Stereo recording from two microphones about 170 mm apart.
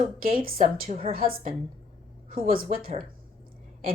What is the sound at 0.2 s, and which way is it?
A woman's voice, 60° right (ahead or behind).